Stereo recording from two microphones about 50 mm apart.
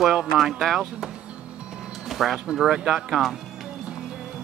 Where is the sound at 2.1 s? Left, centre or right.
Centre.